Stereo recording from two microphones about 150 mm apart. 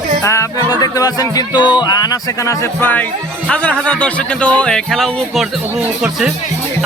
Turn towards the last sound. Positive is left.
turn(degrees=-5)  # may be behind; listen again after turning